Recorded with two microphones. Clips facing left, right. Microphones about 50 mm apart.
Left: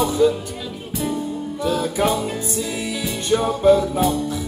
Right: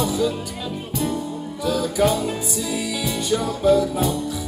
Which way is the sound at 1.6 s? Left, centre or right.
Left.